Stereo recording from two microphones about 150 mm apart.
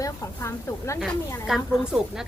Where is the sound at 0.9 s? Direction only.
Centre (ahead or behind).